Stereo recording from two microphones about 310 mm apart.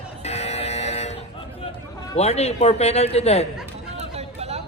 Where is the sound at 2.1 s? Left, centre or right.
Left.